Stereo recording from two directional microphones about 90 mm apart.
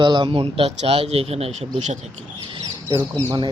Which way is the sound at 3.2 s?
60° right (ahead or behind).